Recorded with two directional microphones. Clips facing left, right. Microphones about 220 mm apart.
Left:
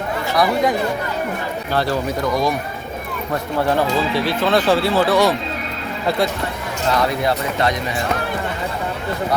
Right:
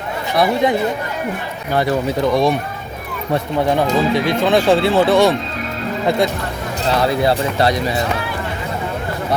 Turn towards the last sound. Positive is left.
turn(degrees=-30)  # may be behind; listen again after turning